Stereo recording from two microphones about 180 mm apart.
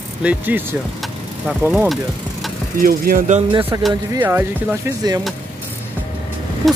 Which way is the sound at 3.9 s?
15° right (ahead or behind).